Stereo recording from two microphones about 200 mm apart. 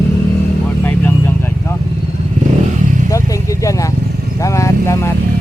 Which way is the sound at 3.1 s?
15° left (ahead or behind).